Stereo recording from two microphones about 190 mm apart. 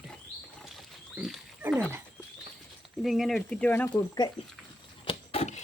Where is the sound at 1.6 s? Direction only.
10° right (ahead or behind).